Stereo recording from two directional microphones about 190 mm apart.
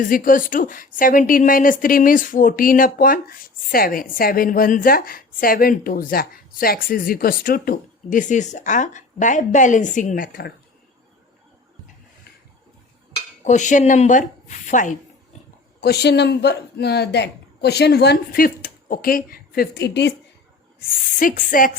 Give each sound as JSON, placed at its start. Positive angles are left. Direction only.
{"t": 0.0, "sound": "a woman's voice", "side_deg": 45}
{"t": 13.4, "sound": "speech", "side_deg": 40}
{"t": 15.8, "sound": "a woman's voice", "side_deg": 60}
{"t": 21.2, "sound": "a woman's voice", "side_deg": 45}